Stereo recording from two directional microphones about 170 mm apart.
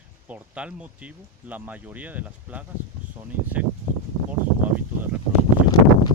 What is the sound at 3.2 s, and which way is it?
Speech, 25° right (ahead or behind).